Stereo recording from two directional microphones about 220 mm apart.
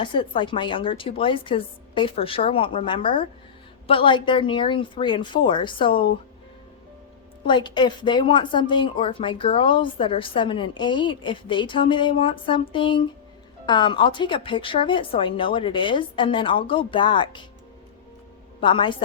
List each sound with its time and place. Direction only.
0.0 s speech: 20° left (ahead or behind)
7.4 s speech: 20° left (ahead or behind)
18.6 s speech: 20° left (ahead or behind)